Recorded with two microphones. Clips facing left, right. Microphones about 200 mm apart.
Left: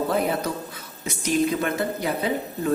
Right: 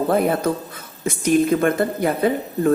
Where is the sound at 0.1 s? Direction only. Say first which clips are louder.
Right 5 dB; 50° right (ahead or behind).